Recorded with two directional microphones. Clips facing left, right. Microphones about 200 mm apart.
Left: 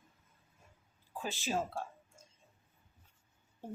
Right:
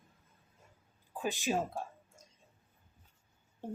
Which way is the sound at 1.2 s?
15° right (ahead or behind).